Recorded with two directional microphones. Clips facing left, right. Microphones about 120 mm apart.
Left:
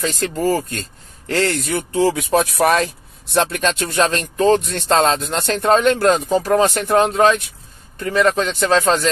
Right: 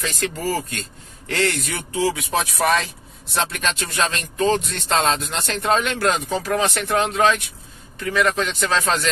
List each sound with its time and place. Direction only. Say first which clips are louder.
0.0 s speech: left 5 dB; 35° left (ahead or behind); by 3.4 s 55° left (ahead or behind)
3.5 s speech: left 6 dB; 40° left (ahead or behind)